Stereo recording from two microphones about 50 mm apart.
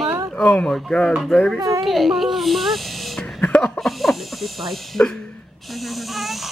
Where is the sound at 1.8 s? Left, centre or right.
Centre.